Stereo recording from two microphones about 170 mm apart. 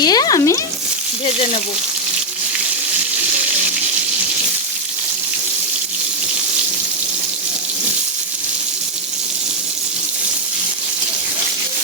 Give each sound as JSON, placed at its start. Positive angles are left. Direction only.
{"t": 0.0, "sound": "stir", "side_deg": 25}